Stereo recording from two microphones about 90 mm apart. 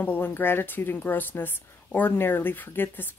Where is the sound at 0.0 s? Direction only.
20° left (ahead or behind).